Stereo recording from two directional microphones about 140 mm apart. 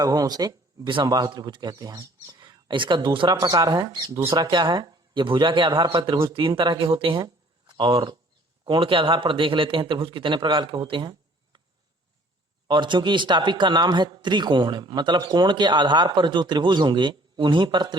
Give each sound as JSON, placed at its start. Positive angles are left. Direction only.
{"t": 0.0, "sound": "a man's voice", "side_deg": -25}
{"t": 12.6, "sound": "a man's voice", "side_deg": -35}